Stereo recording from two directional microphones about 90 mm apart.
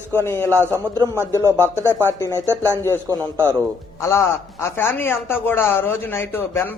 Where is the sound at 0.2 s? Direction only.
30° left (ahead or behind).